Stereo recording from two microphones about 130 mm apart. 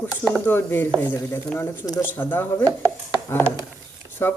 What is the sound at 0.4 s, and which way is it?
Speech, 15° left (ahead or behind).